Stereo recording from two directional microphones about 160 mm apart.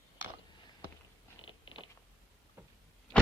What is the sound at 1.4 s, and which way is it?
Cat, 30° left (ahead or behind).